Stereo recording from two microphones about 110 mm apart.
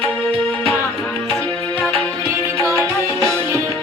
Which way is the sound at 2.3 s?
25° right (ahead or behind).